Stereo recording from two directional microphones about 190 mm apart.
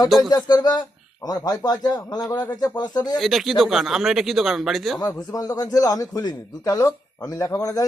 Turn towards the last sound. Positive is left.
turn(degrees=15)  # may be behind; listen again after turning